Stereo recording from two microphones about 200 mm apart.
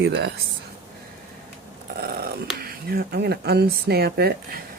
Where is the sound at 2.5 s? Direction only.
50° right (ahead or behind).